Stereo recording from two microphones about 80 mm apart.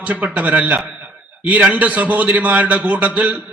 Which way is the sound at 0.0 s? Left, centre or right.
Centre.